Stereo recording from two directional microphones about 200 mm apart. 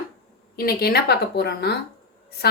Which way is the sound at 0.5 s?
50° left (ahead or behind).